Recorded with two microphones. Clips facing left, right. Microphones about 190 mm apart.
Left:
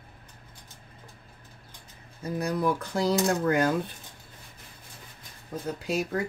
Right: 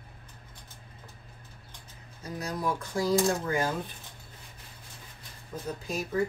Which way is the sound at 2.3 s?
60° left (ahead or behind).